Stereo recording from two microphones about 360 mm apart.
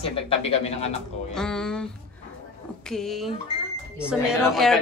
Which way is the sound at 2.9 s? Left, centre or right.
Centre.